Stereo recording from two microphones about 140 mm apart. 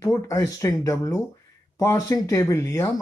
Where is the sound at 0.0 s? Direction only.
25° left (ahead or behind).